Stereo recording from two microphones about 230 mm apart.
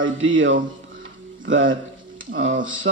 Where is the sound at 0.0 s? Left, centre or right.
Right.